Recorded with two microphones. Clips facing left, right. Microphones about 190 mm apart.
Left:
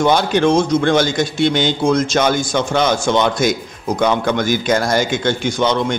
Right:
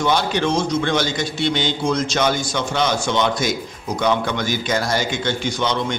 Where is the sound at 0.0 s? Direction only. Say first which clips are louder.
Left 5 dB; 50° left (ahead or behind).